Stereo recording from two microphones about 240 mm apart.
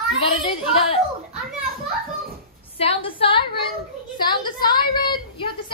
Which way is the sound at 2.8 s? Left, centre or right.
Left.